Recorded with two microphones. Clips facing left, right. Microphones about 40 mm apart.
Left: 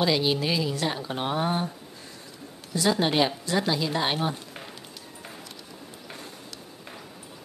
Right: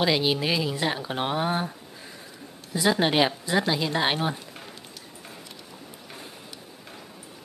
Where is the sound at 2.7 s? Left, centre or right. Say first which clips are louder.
Right 1 dB; centre.